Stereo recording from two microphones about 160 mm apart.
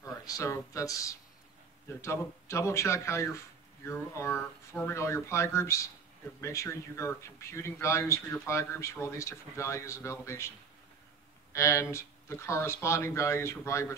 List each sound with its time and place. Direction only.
0.0 s speech: 20° left (ahead or behind)
11.5 s speech: 15° left (ahead or behind)